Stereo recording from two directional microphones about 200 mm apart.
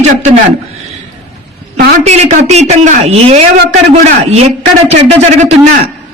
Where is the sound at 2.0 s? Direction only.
35° right (ahead or behind).